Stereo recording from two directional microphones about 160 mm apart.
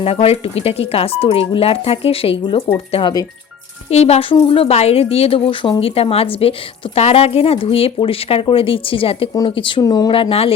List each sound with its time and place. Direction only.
0.0 s speech: 40° left (ahead or behind)
3.8 s speech: 40° left (ahead or behind)